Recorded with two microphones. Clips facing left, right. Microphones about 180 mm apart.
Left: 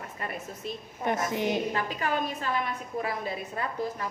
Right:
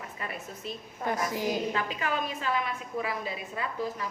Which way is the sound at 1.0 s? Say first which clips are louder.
Left 2 dB; 25° left (ahead or behind).